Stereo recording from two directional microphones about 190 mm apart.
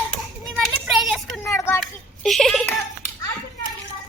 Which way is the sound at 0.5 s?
Centre (ahead or behind).